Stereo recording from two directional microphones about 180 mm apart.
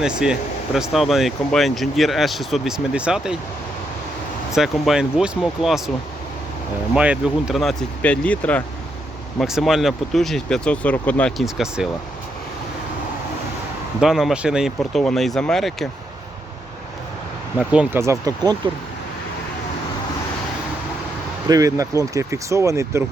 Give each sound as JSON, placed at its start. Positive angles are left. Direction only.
{"t": 0.0, "sound": "speech", "side_deg": -5}
{"t": 4.5, "sound": "speech", "side_deg": 0}
{"t": 6.9, "sound": "speech", "side_deg": -5}
{"t": 14.0, "sound": "speech", "side_deg": 0}
{"t": 17.6, "sound": "speech", "side_deg": -5}
{"t": 21.4, "sound": "speech", "side_deg": -20}